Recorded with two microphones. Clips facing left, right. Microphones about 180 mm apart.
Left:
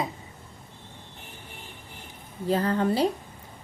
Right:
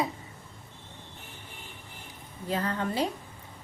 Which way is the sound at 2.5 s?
35° left (ahead or behind).